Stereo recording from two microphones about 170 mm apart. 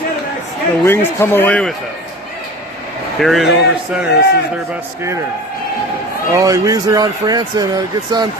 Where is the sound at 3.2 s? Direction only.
Centre (ahead or behind).